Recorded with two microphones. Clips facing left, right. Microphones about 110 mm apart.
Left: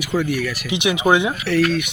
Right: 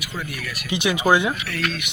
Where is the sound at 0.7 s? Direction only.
20° left (ahead or behind).